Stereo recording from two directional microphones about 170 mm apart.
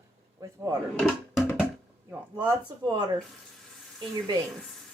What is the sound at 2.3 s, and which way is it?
Speech, 25° right (ahead or behind).